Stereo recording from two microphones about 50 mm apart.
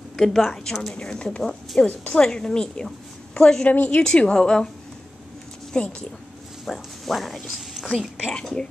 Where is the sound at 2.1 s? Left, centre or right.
Centre.